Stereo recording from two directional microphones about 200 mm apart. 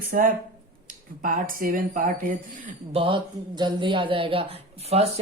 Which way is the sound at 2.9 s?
25° right (ahead or behind).